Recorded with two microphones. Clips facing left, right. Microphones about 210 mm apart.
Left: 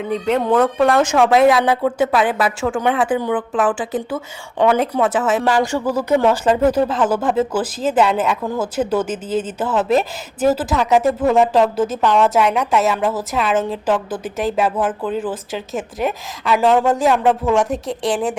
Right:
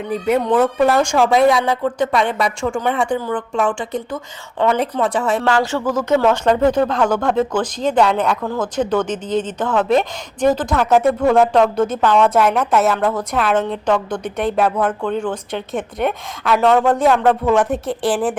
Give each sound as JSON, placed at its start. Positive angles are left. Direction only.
{"t": 0.0, "sound": "speech", "side_deg": -5}
{"t": 3.2, "sound": "speech", "side_deg": 15}
{"t": 3.5, "sound": "speech", "side_deg": 5}